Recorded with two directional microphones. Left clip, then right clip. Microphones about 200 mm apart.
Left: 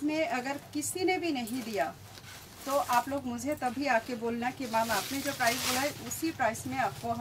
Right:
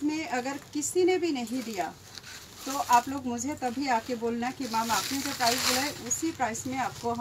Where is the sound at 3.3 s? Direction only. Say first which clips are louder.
Right 1 dB; 15° left (ahead or behind).